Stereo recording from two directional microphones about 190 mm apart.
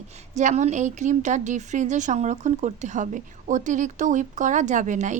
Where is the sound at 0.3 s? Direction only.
40° right (ahead or behind).